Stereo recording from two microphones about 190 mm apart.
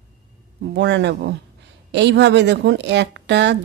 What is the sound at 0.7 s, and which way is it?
A woman's voice, 70° right (ahead or behind).